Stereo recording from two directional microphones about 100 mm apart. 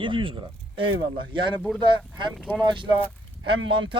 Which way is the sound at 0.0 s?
55° right (ahead or behind).